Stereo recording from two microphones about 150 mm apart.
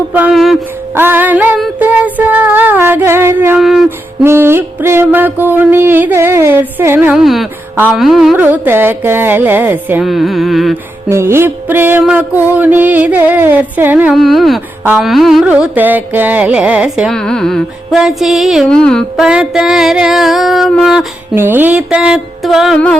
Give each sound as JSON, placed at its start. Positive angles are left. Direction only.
{"t": 0.1, "sound": "speech", "side_deg": -5}
{"t": 0.9, "sound": "music", "side_deg": -15}
{"t": 3.8, "sound": "music", "side_deg": -15}
{"t": 7.2, "sound": "carnatic music", "side_deg": 0}
{"t": 7.8, "sound": "music", "side_deg": -5}
{"t": 10.1, "sound": "carnatic music", "side_deg": 0}
{"t": 11.1, "sound": "music", "side_deg": -15}
{"t": 14.2, "sound": "carnatic music", "side_deg": 0}
{"t": 21.3, "sound": "carnatic music", "side_deg": -15}